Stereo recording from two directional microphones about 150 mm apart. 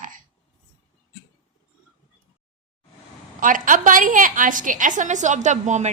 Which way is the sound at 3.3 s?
65° right (ahead or behind).